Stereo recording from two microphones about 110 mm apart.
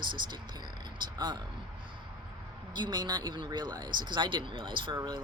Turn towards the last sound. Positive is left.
turn(degrees=-40)  # may be behind; listen again after turning